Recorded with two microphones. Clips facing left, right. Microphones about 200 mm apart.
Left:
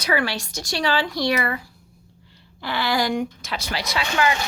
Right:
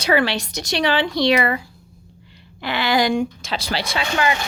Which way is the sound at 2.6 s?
20° right (ahead or behind).